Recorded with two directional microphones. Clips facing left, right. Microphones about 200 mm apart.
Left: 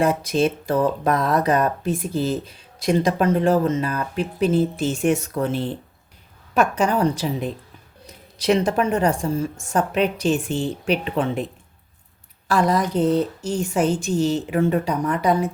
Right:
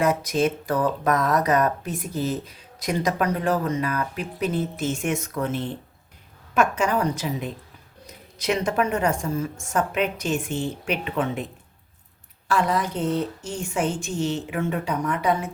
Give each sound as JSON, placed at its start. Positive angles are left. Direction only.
{"t": 0.0, "sound": "a woman's voice", "side_deg": 30}
{"t": 12.5, "sound": "a woman's voice", "side_deg": 40}